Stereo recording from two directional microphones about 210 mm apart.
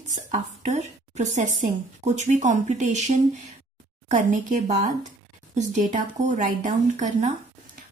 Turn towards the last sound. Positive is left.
turn(degrees=-35)  # may be behind; listen again after turning